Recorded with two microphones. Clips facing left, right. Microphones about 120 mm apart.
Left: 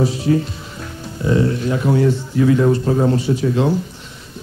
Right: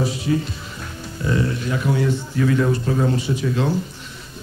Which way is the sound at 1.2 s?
25° left (ahead or behind).